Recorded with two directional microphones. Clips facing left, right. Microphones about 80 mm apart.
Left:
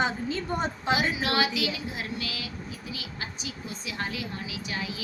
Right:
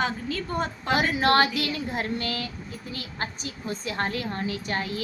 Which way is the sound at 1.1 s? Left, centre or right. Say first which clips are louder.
Right 6 dB; right.